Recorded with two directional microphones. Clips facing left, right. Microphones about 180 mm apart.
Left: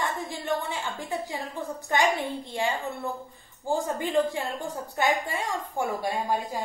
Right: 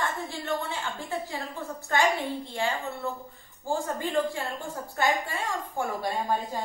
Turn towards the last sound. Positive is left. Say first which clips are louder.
# left 1 dB
turn(degrees=10)  # may be behind; listen again after turning